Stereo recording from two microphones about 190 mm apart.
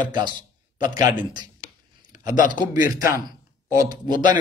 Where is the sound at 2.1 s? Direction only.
45° left (ahead or behind).